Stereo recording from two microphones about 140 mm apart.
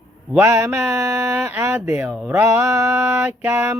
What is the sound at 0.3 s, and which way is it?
Speech, 15° right (ahead or behind).